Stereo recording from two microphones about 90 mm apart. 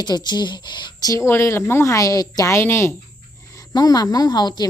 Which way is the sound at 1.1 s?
30° left (ahead or behind).